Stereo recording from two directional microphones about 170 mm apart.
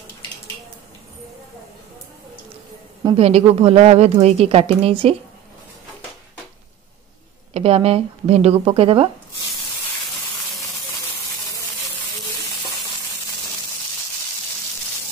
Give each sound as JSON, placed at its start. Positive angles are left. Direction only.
{"t": 3.2, "sound": "a woman's voice", "side_deg": -35}
{"t": 7.5, "sound": "a woman's voice", "side_deg": -35}